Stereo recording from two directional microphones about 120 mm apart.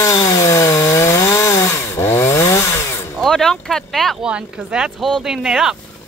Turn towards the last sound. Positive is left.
turn(degrees=-5)  # may be behind; listen again after turning